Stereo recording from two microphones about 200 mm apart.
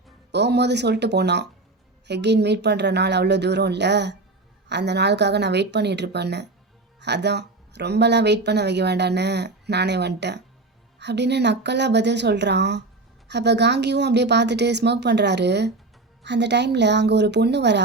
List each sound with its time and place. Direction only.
0.3 s speech: 60° right (ahead or behind)